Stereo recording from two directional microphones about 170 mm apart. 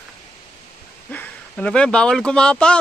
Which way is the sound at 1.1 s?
10° left (ahead or behind).